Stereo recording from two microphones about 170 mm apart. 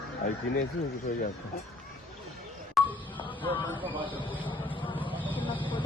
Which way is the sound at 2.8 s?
Centre (ahead or behind).